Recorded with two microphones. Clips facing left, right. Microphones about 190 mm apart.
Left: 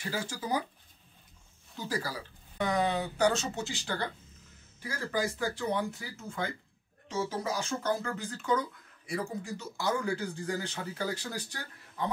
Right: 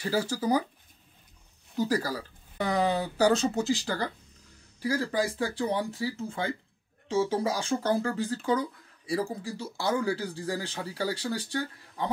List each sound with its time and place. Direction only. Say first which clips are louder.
0.1 s speech: right 7 dB; 35° right (ahead or behind)
1.8 s speech: right 8 dB; 40° right (ahead or behind)